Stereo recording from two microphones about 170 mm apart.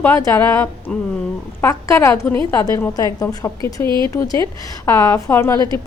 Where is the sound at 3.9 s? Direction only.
25° right (ahead or behind).